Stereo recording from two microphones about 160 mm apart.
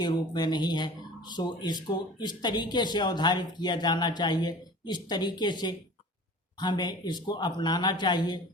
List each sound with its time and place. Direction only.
0.0 s speech: 25° left (ahead or behind)